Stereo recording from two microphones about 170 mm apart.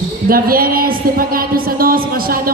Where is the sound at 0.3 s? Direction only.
60° right (ahead or behind).